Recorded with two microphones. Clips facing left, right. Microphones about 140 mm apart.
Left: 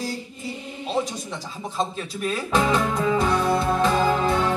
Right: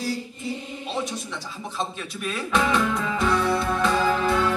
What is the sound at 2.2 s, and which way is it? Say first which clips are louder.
Music: left 2 dB; 30° left (ahead or behind).